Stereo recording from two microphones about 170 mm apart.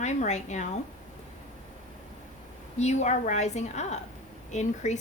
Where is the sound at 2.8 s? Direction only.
40° left (ahead or behind).